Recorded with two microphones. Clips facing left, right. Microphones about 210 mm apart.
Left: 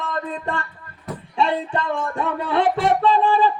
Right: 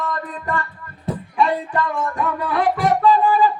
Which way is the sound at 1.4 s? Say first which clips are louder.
Right 1 dB; 25° left (ahead or behind).